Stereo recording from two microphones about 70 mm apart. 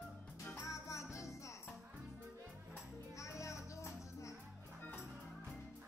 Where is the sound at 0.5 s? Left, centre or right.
Left.